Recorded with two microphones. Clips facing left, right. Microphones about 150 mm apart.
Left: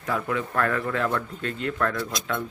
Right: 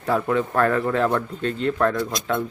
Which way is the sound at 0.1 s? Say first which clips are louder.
Right 6 dB; 35° right (ahead or behind).